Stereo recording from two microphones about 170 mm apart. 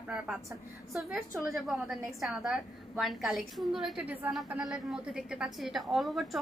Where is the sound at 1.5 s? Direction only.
Centre (ahead or behind).